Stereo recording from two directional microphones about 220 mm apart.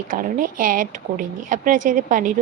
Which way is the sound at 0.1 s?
40° right (ahead or behind).